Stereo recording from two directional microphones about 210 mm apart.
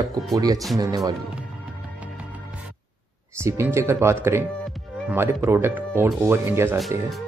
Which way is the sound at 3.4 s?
10° right (ahead or behind).